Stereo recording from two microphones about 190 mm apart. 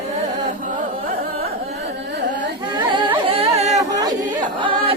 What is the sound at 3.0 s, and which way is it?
Singing, 25° right (ahead or behind).